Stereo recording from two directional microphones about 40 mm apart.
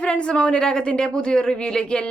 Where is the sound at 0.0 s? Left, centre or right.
Left.